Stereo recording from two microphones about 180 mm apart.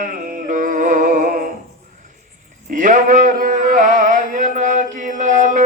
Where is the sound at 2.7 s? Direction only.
45° right (ahead or behind).